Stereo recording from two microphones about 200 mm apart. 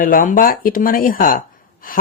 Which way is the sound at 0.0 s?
45° left (ahead or behind).